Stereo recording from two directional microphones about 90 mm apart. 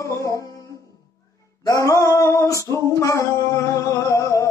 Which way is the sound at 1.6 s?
40° left (ahead or behind).